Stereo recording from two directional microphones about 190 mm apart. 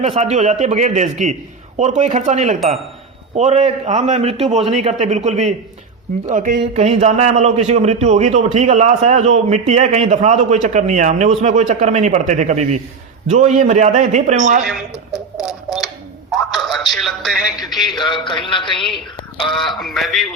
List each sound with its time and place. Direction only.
0.0 s a man's voice: 35° right (ahead or behind)
15.4 s a sound: 5° right (ahead or behind)
16.9 s speech: centre (ahead or behind)
17.9 s speech: 25° left (ahead or behind)
19.5 s speech: centre (ahead or behind)